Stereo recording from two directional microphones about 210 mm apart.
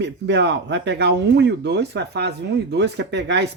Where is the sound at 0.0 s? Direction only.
55° right (ahead or behind).